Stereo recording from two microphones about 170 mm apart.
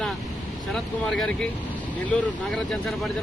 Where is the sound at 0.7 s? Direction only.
5° left (ahead or behind).